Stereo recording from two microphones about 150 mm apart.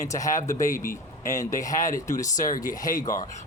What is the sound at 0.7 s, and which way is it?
Speech, 65° left (ahead or behind).